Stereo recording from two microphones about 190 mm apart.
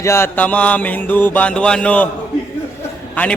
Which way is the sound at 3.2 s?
10° left (ahead or behind).